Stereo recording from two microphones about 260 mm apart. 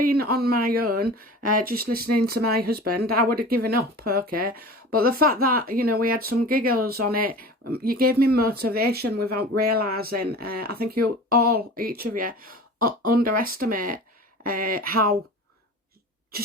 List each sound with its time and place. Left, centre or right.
0.0 s speech: right